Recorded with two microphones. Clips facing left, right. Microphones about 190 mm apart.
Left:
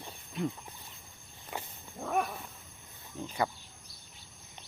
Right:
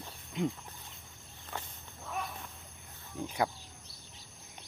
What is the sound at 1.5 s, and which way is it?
Wild animals, 10° left (ahead or behind).